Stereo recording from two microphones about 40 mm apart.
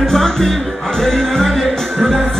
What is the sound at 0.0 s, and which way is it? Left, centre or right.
Music, centre.